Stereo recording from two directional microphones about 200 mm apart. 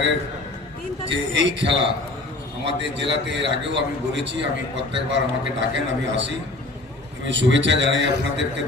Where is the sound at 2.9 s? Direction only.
60° right (ahead or behind).